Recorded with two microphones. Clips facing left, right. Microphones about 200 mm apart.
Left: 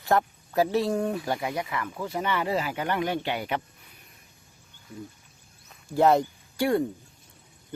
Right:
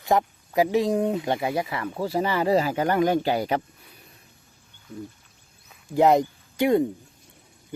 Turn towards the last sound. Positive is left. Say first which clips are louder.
# right 4 dB
turn(degrees=-20)  # may be behind; listen again after turning